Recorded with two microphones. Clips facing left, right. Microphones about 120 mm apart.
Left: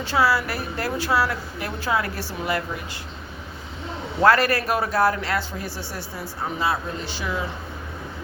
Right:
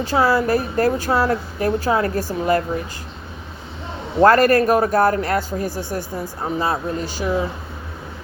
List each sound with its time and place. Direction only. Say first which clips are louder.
0.0 s speech: right 4 dB; 40° right (ahead or behind)
4.2 s speech: right 6 dB; 45° right (ahead or behind)